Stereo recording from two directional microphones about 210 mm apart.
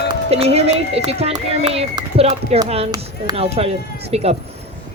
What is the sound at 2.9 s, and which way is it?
Speech, 20° right (ahead or behind).